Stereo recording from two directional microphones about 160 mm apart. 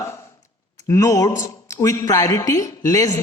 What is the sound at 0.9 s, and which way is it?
A woman's voice, 20° left (ahead or behind).